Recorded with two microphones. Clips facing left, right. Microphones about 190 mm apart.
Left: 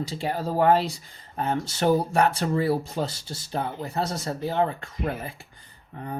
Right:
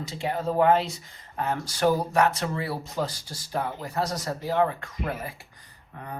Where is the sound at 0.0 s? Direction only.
30° left (ahead or behind).